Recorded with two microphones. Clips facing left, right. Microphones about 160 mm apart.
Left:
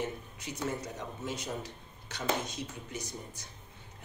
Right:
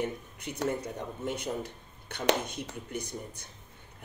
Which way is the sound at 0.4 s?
60° right (ahead or behind).